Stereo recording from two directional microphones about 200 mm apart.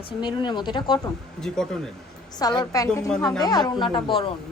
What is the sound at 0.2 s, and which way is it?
Speech, 20° left (ahead or behind).